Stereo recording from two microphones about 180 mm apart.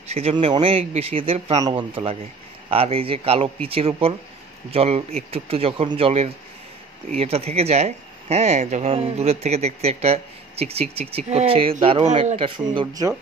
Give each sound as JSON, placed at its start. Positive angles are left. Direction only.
{"t": 0.1, "sound": "speech", "side_deg": -35}
{"t": 12.4, "sound": "speech", "side_deg": -25}